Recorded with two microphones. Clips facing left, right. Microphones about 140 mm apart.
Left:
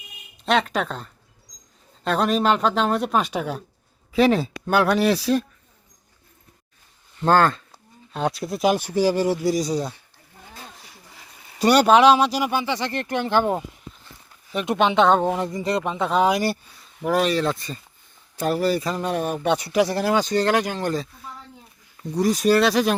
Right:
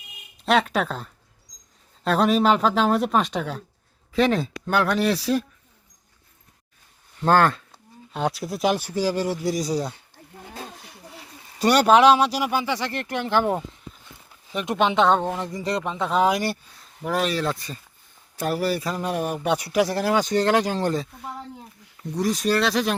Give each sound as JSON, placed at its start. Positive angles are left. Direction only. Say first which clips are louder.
{"t": 0.4, "sound": "speech", "louder": "right 1 dB", "side_deg": 0}
{"t": 7.2, "sound": "speech", "louder": "left 1 dB", "side_deg": -10}
{"t": 8.7, "sound": "speech", "louder": "left 3 dB", "side_deg": 15}
{"t": 10.8, "sound": "a sound", "louder": "right 2 dB", "side_deg": -60}
{"t": 11.6, "sound": "speech", "louder": "left 1 dB", "side_deg": 0}
{"t": 13.3, "sound": "speech", "louder": "even", "side_deg": 15}
{"t": 14.5, "sound": "speech", "louder": "left 2 dB", "side_deg": 0}
{"t": 15.2, "sound": "speech", "louder": "left 4 dB", "side_deg": 15}
{"t": 20.2, "sound": "speech", "louder": "even", "side_deg": -20}
{"t": 22.1, "sound": "speech", "louder": "left 4 dB", "side_deg": 5}